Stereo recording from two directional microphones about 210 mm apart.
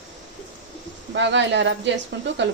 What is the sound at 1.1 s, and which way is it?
Speech, 60° right (ahead or behind).